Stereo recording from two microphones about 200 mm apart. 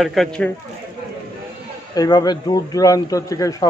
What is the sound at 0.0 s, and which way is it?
Speech, centre (ahead or behind).